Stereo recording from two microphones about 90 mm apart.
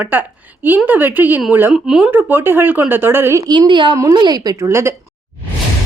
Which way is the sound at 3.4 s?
55° right (ahead or behind).